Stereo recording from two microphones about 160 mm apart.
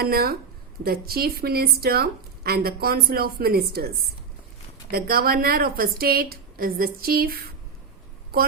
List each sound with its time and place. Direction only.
0.0 s a woman's voice: 75° right (ahead or behind)